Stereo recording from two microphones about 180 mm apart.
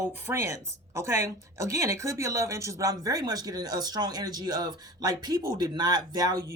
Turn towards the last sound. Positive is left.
turn(degrees=-20)  # may be behind; listen again after turning